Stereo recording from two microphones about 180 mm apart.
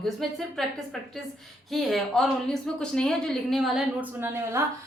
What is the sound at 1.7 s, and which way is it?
A woman's voice, centre (ahead or behind).